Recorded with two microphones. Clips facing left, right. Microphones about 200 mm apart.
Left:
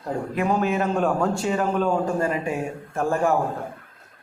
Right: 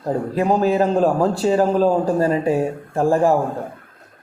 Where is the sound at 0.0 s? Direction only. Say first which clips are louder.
Right 5 dB; 35° right (ahead or behind).